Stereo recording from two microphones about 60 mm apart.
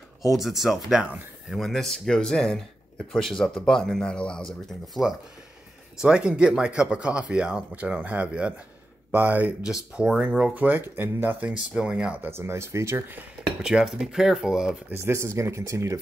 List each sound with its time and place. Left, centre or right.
0.3 s speech: centre
5.9 s speech: centre
9.1 s speech: right
9.6 s speech: centre
10.5 s speech: right
10.8 s speech: right
11.3 s speech: right
12.2 s speech: right
13.6 s speech: centre
14.9 s speech: right